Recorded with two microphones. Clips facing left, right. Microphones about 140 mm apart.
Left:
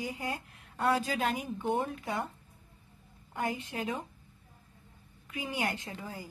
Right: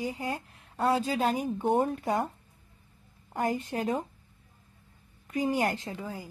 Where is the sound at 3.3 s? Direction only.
45° right (ahead or behind).